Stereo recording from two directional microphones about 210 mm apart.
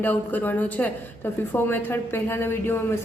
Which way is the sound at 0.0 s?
10° left (ahead or behind).